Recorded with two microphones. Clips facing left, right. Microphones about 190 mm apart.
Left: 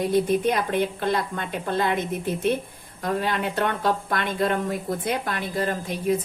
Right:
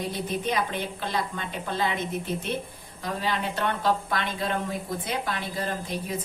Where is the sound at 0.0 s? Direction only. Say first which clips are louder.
Left 9 dB; 50° left (ahead or behind).